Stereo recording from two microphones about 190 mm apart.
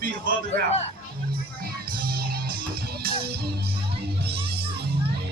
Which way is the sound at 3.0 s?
55° right (ahead or behind).